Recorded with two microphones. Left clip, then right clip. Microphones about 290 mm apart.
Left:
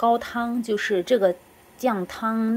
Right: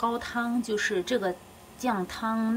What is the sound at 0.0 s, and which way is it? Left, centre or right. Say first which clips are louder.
A woman's voice: left 7 dB; centre.